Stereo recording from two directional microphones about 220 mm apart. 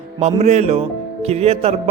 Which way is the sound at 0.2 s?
30° right (ahead or behind).